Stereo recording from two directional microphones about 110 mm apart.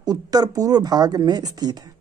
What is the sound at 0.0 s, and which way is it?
Speech, 35° right (ahead or behind).